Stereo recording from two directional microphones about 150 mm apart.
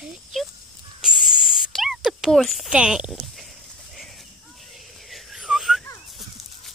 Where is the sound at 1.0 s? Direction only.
5° right (ahead or behind).